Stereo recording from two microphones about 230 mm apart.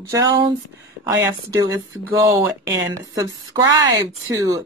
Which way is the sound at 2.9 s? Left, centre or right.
Centre.